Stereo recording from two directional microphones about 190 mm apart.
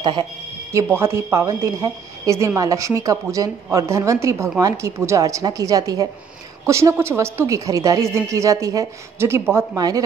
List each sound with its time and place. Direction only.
0.0 s a woman's voice: 20° right (ahead or behind)